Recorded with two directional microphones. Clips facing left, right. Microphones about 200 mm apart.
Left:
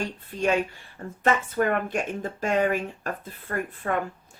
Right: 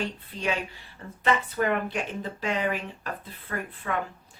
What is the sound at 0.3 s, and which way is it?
Speech, 45° left (ahead or behind).